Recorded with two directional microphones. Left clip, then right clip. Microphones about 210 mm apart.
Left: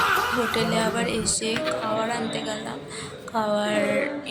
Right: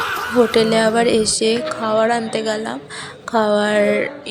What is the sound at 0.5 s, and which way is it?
Music, 30° right (ahead or behind).